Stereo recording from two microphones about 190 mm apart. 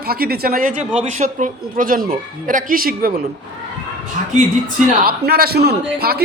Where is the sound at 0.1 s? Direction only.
55° right (ahead or behind).